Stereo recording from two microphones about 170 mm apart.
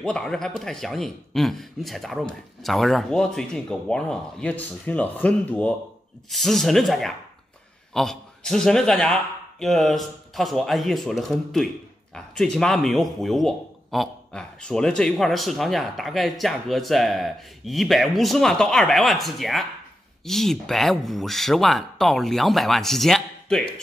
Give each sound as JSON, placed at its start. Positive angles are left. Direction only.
{"t": 0.0, "sound": "a man's voice", "side_deg": 5}